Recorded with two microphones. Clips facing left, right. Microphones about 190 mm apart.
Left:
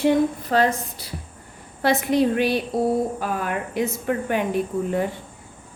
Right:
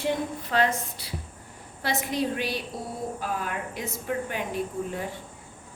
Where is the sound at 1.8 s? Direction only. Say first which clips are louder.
Left 9 dB; 60° left (ahead or behind).